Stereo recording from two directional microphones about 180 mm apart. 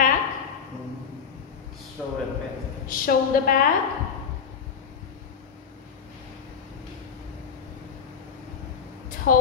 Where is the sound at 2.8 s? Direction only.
50° left (ahead or behind).